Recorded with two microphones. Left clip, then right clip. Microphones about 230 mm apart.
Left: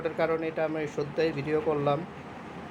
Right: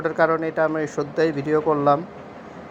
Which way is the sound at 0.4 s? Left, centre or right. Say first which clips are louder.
Right 8 dB; right.